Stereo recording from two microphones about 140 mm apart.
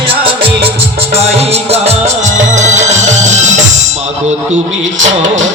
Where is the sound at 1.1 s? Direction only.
50° right (ahead or behind).